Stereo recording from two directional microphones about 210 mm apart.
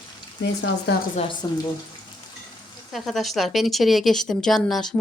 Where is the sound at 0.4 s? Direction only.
60° left (ahead or behind).